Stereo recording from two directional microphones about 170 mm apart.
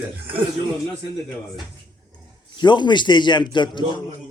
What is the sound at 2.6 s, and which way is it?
Speech, 25° left (ahead or behind).